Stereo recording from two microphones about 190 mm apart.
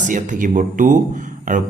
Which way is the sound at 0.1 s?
45° right (ahead or behind).